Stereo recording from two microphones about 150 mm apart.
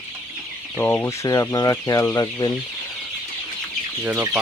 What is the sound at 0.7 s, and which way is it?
Speech, 15° left (ahead or behind).